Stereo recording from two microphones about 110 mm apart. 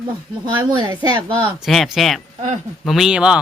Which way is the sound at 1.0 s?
45° right (ahead or behind).